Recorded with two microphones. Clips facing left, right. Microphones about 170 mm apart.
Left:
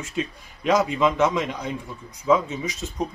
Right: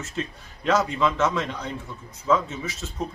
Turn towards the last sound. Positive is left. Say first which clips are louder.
# left 3 dB
turn(degrees=15)  # may be behind; listen again after turning